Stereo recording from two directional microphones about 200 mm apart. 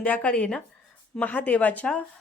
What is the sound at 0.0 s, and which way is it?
A woman's voice, 5° left (ahead or behind).